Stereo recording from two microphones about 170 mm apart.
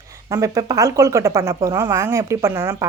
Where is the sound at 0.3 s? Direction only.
20° right (ahead or behind).